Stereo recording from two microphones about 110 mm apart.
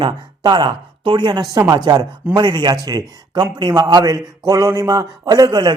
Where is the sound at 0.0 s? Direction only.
45° right (ahead or behind).